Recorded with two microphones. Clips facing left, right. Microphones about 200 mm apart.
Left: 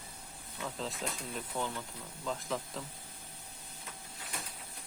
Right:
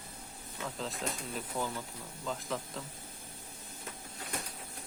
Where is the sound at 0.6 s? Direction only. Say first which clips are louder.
Right 1 dB; centre (ahead or behind).